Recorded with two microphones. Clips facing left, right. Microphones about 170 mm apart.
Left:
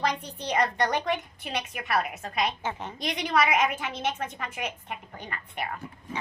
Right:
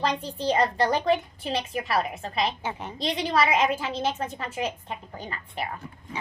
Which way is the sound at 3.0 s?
30° right (ahead or behind).